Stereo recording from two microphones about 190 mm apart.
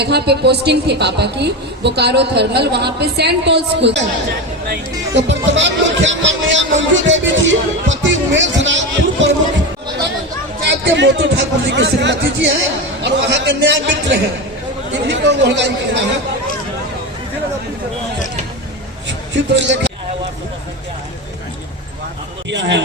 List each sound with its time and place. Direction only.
0.0 s a woman's voice: 60° right (ahead or behind)
10.6 s a woman's voice: 70° right (ahead or behind)
19.0 s a sound: 70° right (ahead or behind)
22.4 s speech: 70° right (ahead or behind)